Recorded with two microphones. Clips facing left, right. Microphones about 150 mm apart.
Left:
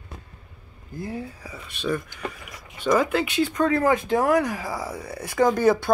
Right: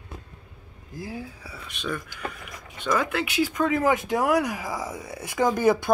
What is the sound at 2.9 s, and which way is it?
Speech, 20° left (ahead or behind).